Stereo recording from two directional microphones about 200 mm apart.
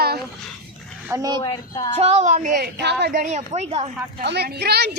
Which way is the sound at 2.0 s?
30° right (ahead or behind).